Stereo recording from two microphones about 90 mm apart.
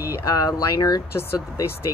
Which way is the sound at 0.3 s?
40° left (ahead or behind).